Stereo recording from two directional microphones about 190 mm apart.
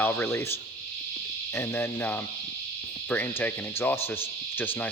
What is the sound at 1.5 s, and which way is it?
Speech, 10° left (ahead or behind).